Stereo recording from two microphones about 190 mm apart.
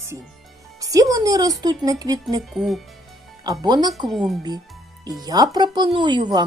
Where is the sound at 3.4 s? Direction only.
20° right (ahead or behind).